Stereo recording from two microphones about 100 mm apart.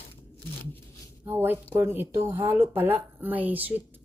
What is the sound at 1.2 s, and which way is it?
Speech, 20° right (ahead or behind).